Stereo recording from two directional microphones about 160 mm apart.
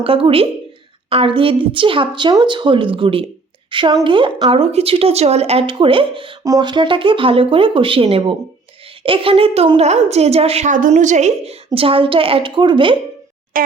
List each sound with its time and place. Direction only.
0.0 s a woman's voice: 35° right (ahead or behind)
13.5 s boing: 60° right (ahead or behind)